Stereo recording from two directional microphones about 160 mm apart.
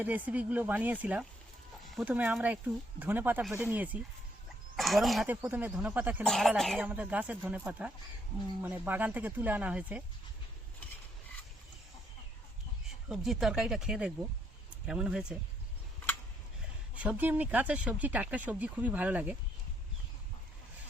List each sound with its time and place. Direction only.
0.0 s speech: 10° right (ahead or behind)
1.8 s a sound: centre (ahead or behind)
2.0 s speech: 10° right (ahead or behind)
4.8 s speech: centre (ahead or behind)
5.3 s speech: 10° right (ahead or behind)
6.2 s speech: centre (ahead or behind)
6.7 s speech: 10° right (ahead or behind)
13.1 s speech: 5° right (ahead or behind)
16.9 s speech: 10° right (ahead or behind)